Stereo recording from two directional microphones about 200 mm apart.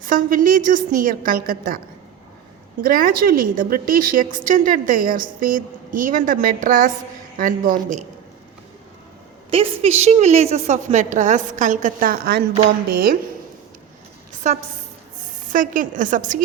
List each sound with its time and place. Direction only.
0.0 s a woman's voice: 45° right (ahead or behind)
2.8 s a woman's voice: 45° right (ahead or behind)
9.5 s a woman's voice: 30° right (ahead or behind); by 12.4 s 50° right (ahead or behind)
14.4 s a woman's voice: 35° right (ahead or behind)